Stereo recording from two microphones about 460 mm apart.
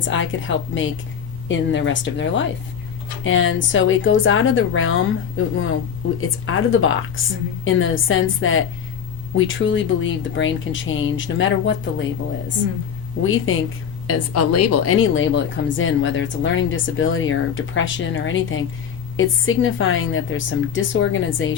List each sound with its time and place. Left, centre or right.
0.0 s speech: left
6.1 s speech: left
13.2 s speech: left